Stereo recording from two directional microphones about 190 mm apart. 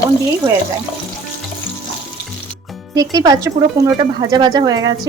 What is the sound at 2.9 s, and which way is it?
A woman's voice, 20° right (ahead or behind).